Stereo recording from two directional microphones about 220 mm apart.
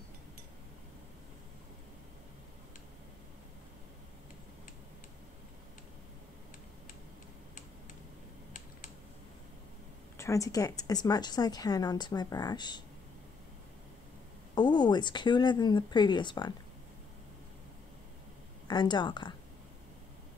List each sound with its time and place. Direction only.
10.1 s a woman's voice: 15° left (ahead or behind)
14.5 s speech: 20° left (ahead or behind)
18.7 s speech: 20° left (ahead or behind)